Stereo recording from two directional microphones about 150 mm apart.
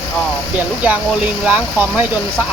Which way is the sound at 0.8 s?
10° right (ahead or behind).